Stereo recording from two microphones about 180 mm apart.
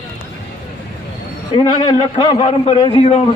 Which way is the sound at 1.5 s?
25° left (ahead or behind).